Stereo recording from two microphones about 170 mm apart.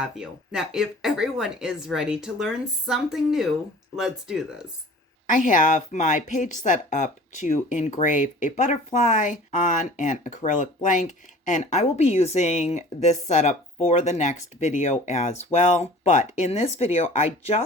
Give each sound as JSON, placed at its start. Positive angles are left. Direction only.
{"t": 0.0, "sound": "speech", "side_deg": -5}
{"t": 5.2, "sound": "a woman's voice", "side_deg": 50}